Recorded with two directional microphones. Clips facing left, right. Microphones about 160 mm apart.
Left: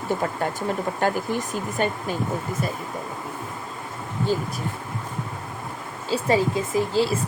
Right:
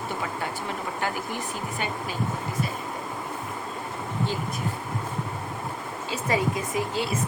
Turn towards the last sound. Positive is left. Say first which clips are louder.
# left 6 dB
turn(degrees=30)  # may be behind; listen again after turning